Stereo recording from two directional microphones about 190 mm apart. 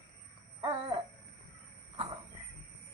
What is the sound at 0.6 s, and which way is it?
Babbling, 25° right (ahead or behind).